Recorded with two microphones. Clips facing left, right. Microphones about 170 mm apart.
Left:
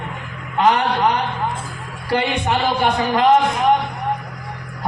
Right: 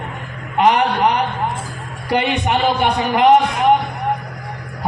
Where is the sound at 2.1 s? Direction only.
15° right (ahead or behind).